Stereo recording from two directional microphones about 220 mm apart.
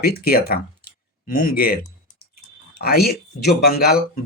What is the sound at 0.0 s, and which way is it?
Speech, 45° left (ahead or behind).